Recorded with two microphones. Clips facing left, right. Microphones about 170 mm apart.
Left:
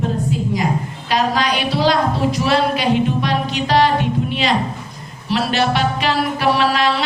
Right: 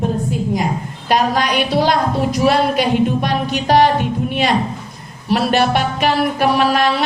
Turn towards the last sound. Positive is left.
turn(degrees=-50)  # may be behind; listen again after turning